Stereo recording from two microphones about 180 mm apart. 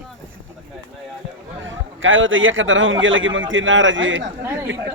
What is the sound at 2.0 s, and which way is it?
A man's voice, 90° right.